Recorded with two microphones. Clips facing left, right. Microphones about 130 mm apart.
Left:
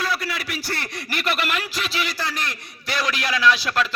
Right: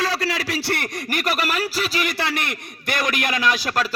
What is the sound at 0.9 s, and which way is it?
A man's voice, 45° right (ahead or behind).